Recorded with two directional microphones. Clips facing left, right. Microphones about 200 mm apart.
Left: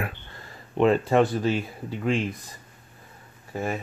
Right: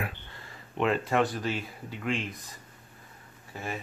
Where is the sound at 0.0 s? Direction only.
40° left (ahead or behind).